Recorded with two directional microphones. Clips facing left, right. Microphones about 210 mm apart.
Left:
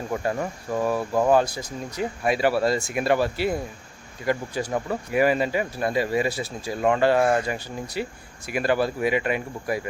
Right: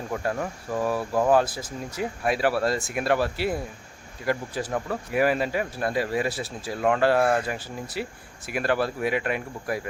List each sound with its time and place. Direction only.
0.1 s speech: 5° left (ahead or behind)